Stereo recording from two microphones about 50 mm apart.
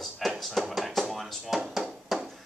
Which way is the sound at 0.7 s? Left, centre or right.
Centre.